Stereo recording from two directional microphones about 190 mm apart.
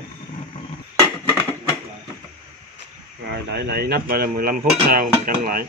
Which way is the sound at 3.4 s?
60° right (ahead or behind).